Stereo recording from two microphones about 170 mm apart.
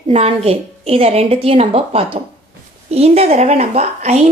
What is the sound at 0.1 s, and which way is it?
Speech, 35° right (ahead or behind).